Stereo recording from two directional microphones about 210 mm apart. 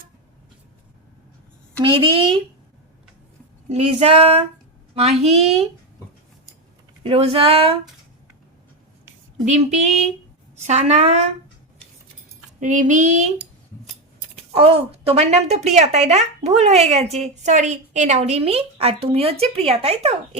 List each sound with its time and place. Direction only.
1.8 s speech: 25° right (ahead or behind)
3.7 s speech: 25° right (ahead or behind)
7.0 s speech: 25° right (ahead or behind)
9.4 s a sound: 30° right (ahead or behind)
12.5 s a sound: 35° right (ahead or behind)
14.5 s speech: 25° right (ahead or behind)